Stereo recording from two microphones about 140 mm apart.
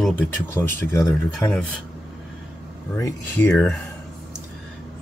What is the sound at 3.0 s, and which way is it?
Speech, 10° left (ahead or behind).